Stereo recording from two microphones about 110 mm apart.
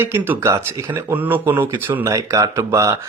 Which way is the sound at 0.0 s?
20° right (ahead or behind).